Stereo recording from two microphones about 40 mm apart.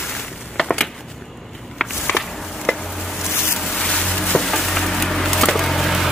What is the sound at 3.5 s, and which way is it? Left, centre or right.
Vehicle, centre.